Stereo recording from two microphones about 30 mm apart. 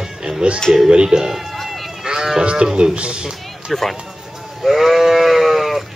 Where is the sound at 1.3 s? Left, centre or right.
Centre.